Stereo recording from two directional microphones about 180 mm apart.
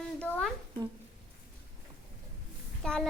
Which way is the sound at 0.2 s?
5° left (ahead or behind).